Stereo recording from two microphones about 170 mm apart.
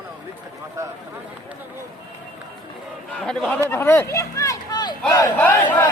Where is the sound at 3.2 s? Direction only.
5° left (ahead or behind); by 4.9 s 20° left (ahead or behind).